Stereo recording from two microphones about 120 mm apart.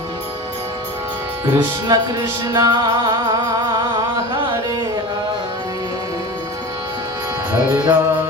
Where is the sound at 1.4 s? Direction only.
30° right (ahead or behind).